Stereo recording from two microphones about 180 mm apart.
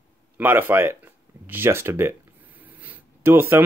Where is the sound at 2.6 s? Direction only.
10° right (ahead or behind).